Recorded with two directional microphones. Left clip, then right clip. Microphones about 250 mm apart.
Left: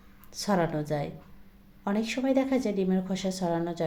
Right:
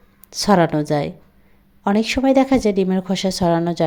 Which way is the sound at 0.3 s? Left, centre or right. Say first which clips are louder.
Right 12 dB; right.